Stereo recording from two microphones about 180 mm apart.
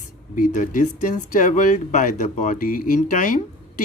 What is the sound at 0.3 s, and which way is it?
Speech, 45° left (ahead or behind).